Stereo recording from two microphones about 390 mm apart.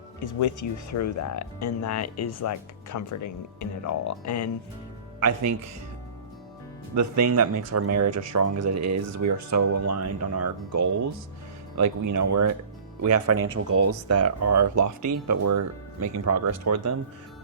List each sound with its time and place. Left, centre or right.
0.3 s speech: left
5.2 s speech: right
6.9 s speech: right